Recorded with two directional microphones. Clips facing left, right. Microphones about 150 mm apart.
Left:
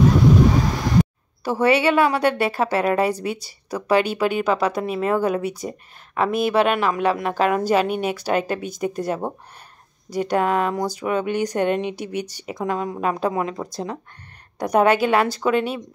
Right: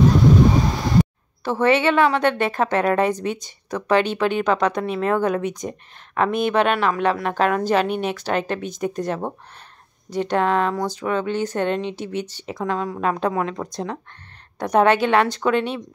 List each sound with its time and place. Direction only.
1.4 s a woman's voice: 10° left (ahead or behind)